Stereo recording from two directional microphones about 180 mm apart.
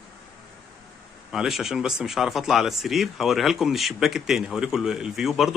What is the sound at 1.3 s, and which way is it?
Speech, centre (ahead or behind).